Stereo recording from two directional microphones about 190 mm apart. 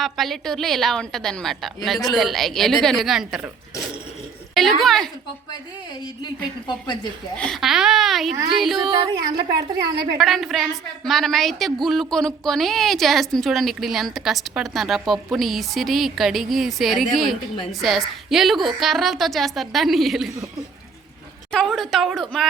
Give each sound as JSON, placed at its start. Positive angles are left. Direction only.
{"t": 0.0, "sound": "a woman's voice", "side_deg": 0}
{"t": 6.2, "sound": "a woman's voice", "side_deg": 25}
{"t": 7.3, "sound": "a woman's voice", "side_deg": 5}
{"t": 9.5, "sound": "a woman's voice", "side_deg": -60}
{"t": 10.2, "sound": "a woman's voice", "side_deg": 0}
{"t": 21.5, "sound": "a woman's voice", "side_deg": 0}